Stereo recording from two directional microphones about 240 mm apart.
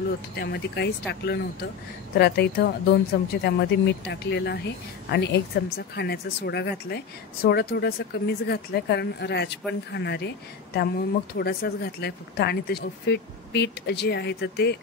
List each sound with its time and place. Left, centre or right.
0.4 s speech: left